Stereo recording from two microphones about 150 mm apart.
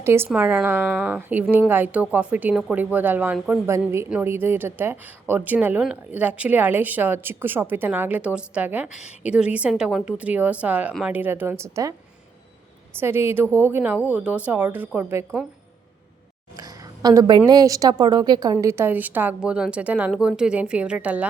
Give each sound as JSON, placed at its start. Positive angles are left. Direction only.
{"t": 0.0, "sound": "a woman's voice", "side_deg": -15}
{"t": 3.7, "sound": "a woman's voice", "side_deg": -15}
{"t": 13.0, "sound": "a woman's voice", "side_deg": -15}
{"t": 16.6, "sound": "a woman's voice", "side_deg": -25}